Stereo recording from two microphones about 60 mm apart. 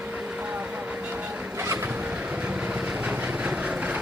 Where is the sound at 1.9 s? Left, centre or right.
Right.